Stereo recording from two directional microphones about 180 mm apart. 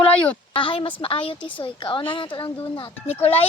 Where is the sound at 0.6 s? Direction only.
30° left (ahead or behind).